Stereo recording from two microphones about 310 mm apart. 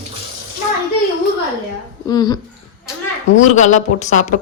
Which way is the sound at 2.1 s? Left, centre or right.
Centre.